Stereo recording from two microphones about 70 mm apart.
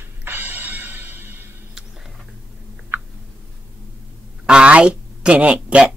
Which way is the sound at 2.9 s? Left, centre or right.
Right.